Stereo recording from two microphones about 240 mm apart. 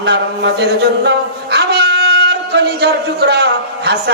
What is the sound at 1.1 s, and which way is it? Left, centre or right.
Wind instrument, right.